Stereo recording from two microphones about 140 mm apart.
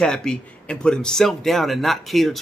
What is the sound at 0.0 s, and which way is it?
Speech, 5° left (ahead or behind).